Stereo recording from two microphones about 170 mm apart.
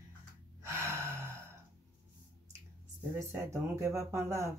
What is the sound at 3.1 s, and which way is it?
Speech, 15° right (ahead or behind).